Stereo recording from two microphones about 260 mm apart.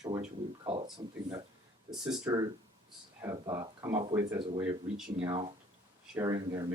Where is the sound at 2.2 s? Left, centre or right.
Centre.